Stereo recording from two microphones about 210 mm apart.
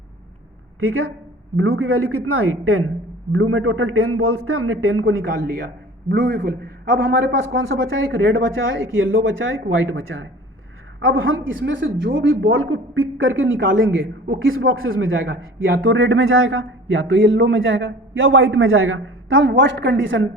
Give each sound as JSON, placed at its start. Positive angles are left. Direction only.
{"t": 0.8, "sound": "speech", "side_deg": -80}
{"t": 1.5, "sound": "a man's voice", "side_deg": -90}
{"t": 5.4, "sound": "a man's voice", "side_deg": -50}